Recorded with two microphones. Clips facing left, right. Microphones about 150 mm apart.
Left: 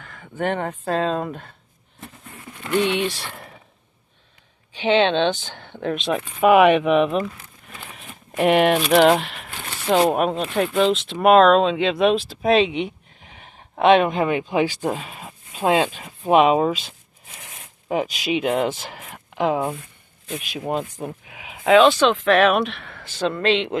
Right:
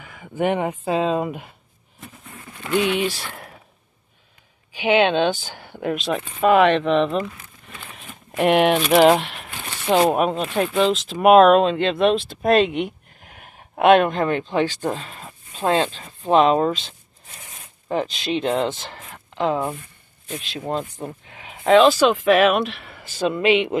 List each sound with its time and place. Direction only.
0.0 s speech: 10° right (ahead or behind)
2.6 s speech: 5° right (ahead or behind)
4.7 s speech: 10° right (ahead or behind)